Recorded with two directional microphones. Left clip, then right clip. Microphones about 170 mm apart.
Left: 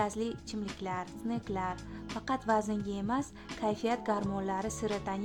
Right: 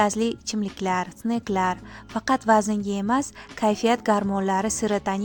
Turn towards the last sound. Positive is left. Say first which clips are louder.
# right 10 dB
turn(degrees=-35)  # may be behind; listen again after turning